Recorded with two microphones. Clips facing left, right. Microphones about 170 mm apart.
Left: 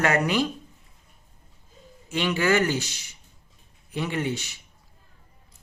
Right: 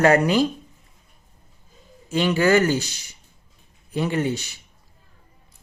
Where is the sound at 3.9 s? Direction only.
40° right (ahead or behind).